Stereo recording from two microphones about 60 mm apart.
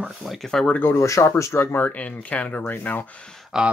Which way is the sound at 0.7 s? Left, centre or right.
Left.